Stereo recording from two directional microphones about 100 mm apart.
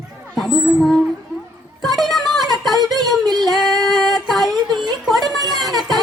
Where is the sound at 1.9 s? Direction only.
Centre (ahead or behind).